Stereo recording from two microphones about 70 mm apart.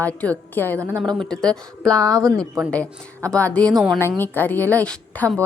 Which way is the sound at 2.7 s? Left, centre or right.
Centre.